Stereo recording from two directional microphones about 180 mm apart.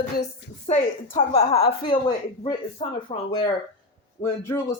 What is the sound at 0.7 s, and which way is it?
A woman's voice, 35° left (ahead or behind).